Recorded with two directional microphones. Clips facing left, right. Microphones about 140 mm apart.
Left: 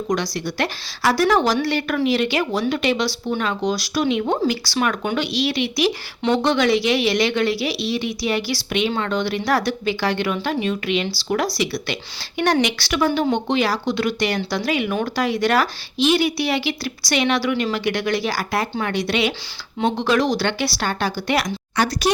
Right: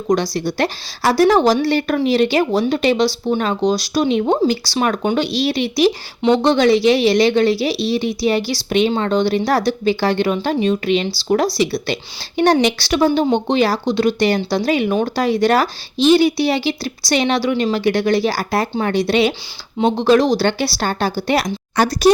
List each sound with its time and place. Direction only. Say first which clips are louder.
0.2 s a woman's voice: right 5 dB; 30° right (ahead or behind)